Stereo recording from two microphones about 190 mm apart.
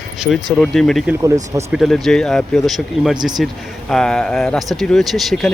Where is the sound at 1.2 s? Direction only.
15° right (ahead or behind).